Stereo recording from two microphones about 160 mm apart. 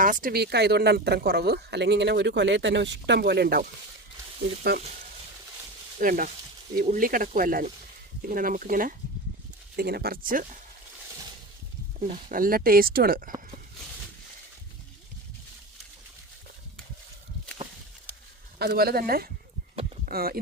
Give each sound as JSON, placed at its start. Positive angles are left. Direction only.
{"t": 0.0, "sound": "speech", "side_deg": -60}
{"t": 6.0, "sound": "speech", "side_deg": -60}
{"t": 9.7, "sound": "speech", "side_deg": -75}
{"t": 12.0, "sound": "speech", "side_deg": -55}
{"t": 18.6, "sound": "speech", "side_deg": -75}